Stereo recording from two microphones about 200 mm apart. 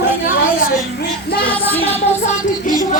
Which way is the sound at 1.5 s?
10° left (ahead or behind).